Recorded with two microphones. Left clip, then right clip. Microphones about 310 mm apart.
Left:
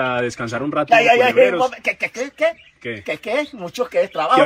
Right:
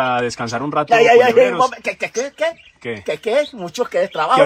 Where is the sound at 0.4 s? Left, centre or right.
Right.